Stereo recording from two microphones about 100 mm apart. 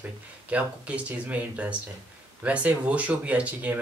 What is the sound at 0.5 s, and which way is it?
Speech, 15° right (ahead or behind).